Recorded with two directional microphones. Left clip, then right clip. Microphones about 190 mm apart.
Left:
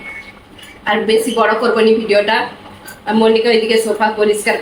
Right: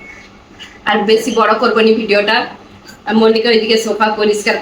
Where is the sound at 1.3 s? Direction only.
15° right (ahead or behind).